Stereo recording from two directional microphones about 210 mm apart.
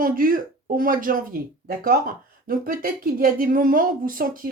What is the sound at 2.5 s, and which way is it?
Speech, 45° right (ahead or behind).